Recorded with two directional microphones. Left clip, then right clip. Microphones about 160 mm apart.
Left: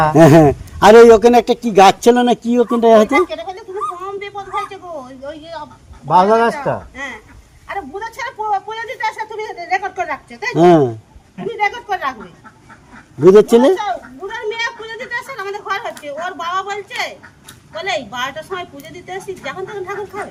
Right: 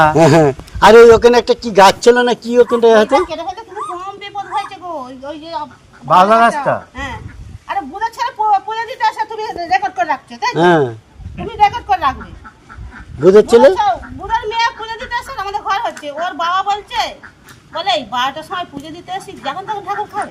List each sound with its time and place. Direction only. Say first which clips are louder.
0.2 s a man's voice: left 1 dB; 80° left
3.2 s speech: right 3 dB; 15° left (ahead or behind)
4.0 s a sound: right 1 dB; 15° left (ahead or behind)
6.1 s a man's voice: right 3 dB; 30° left (ahead or behind)
7.7 s a sound: right 6 dB; 15° left (ahead or behind)
10.5 s speech: left 2 dB; 90° left
11.5 s a woman's voice: right 7 dB; 15° left (ahead or behind)
13.2 s speech: right 1 dB; 20° left (ahead or behind)
13.7 s a sound: right 6 dB; 15° left (ahead or behind)
17.7 s a woman's voice: right 5 dB; 20° left (ahead or behind)